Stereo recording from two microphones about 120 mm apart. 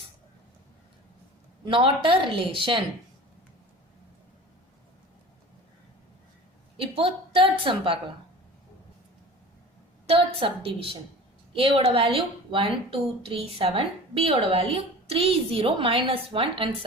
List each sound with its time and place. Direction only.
1.6 s a woman's voice: 45° right (ahead or behind)
6.9 s a woman's voice: 50° right (ahead or behind)
10.1 s a woman's voice: 50° right (ahead or behind)